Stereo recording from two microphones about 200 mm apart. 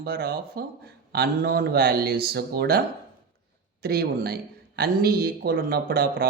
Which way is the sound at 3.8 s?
50° right (ahead or behind).